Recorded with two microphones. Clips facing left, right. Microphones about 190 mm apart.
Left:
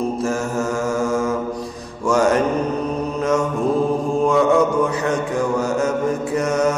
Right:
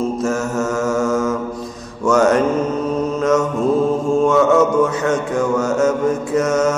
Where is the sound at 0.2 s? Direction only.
30° left (ahead or behind).